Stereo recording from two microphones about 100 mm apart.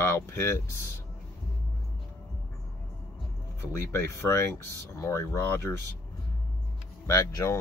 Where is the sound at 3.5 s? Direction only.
25° left (ahead or behind).